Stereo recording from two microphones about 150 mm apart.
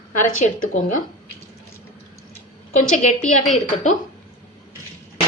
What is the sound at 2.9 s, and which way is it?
A woman's voice, 50° left (ahead or behind).